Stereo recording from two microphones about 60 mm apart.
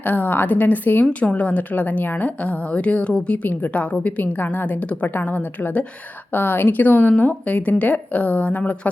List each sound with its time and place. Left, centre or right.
0.0 s a woman's voice: left
1.2 s a woman's voice: left